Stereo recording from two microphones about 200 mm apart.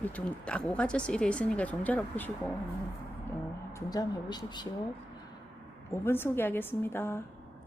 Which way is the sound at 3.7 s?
20° left (ahead or behind).